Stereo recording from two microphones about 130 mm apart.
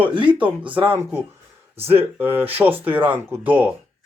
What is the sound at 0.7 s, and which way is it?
Speech, 15° right (ahead or behind).